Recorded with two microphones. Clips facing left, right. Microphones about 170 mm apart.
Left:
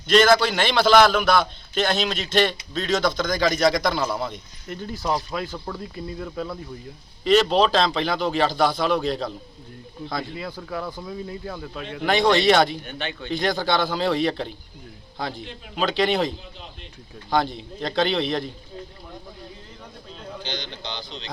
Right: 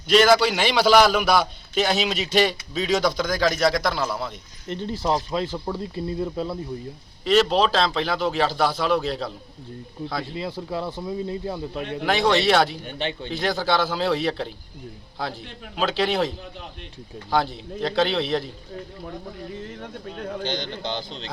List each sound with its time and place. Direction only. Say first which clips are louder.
0.1 s a man's voice: even; 10° right (ahead or behind)
4.7 s speech: right 2 dB; 30° right (ahead or behind)
7.3 s speech: left 1 dB; 5° right (ahead or behind)
10.3 s speech: right 2 dB; 25° right (ahead or behind)
12.0 s speech: left 2 dB; 5° right (ahead or behind)
12.8 s speech: right 3 dB; 30° right (ahead or behind)
13.3 s speech: left 1 dB; 5° right (ahead or behind)
17.3 s speech: even; 5° right (ahead or behind)
20.1 s a man's voice: right 5 dB; 60° right (ahead or behind)